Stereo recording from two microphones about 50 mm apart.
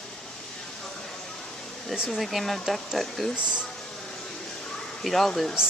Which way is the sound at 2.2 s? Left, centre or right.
Centre.